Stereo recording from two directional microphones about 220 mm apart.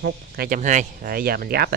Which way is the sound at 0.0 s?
40° right (ahead or behind).